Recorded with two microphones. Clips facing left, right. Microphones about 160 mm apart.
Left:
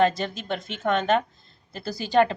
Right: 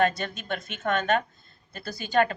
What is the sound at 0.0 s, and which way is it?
A woman's voice, 30° left (ahead or behind).